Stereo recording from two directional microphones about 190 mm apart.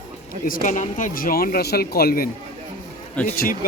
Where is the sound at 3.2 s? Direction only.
10° left (ahead or behind).